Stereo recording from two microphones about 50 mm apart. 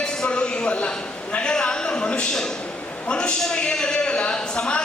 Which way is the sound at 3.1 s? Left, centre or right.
Centre.